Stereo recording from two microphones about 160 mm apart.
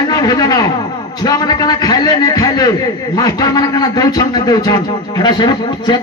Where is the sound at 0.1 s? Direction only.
20° left (ahead or behind).